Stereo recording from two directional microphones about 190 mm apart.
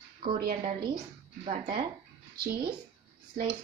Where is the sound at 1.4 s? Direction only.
30° right (ahead or behind).